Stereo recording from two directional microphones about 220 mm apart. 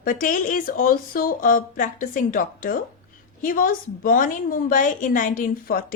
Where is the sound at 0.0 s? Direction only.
40° left (ahead or behind).